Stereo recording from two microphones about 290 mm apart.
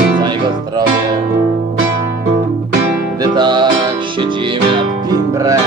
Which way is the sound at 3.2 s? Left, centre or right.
Centre.